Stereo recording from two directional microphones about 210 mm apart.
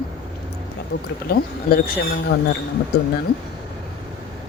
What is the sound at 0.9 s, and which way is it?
Speech, 45° left (ahead or behind).